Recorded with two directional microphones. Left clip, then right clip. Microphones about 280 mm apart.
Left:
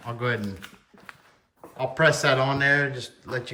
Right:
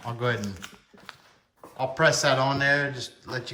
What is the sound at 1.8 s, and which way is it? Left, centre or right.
Speech, centre.